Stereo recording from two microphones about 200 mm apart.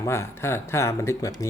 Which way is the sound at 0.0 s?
15° left (ahead or behind).